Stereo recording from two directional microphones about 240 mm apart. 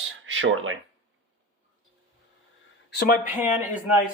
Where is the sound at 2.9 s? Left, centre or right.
Left.